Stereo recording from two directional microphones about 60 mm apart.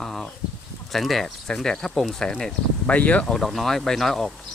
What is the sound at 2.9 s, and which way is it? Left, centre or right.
Speech, left.